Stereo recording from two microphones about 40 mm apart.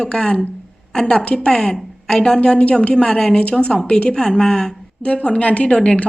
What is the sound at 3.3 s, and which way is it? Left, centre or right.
Speech, left.